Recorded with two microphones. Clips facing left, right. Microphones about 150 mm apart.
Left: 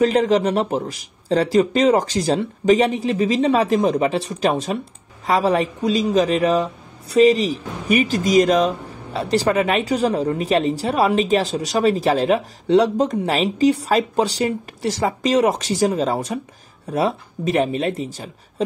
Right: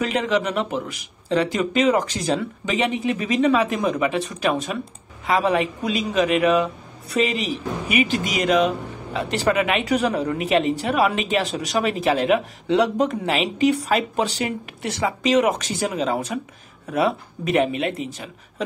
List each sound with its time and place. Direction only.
0.0 s speech: 35° left (ahead or behind)